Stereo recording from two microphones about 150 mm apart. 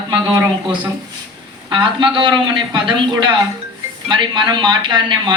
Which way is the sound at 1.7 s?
35° right (ahead or behind).